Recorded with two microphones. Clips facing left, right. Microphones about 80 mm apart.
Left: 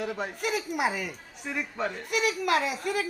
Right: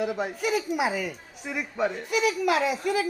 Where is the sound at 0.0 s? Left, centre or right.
Centre.